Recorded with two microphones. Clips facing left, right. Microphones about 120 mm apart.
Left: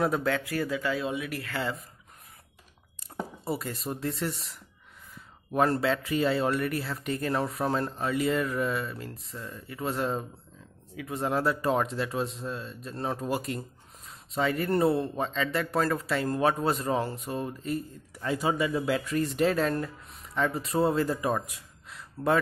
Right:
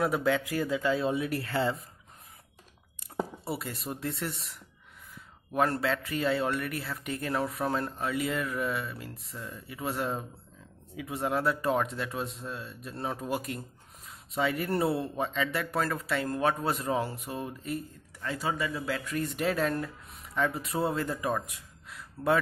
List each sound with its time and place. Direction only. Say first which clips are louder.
0.0 s speech: even; 10° right (ahead or behind); by 1.8 s 30° right (ahead or behind)
3.4 s speech: left 3 dB; 5° right (ahead or behind)
5.5 s speech: left 3 dB; 5° left (ahead or behind)
7.3 s speech: even; 5° left (ahead or behind)
18.2 s speech: left 4 dB; 15° left (ahead or behind)
19.1 s speech: left 3 dB; 5° right (ahead or behind)
21.8 s gasp: left 1 dB; centre (ahead or behind)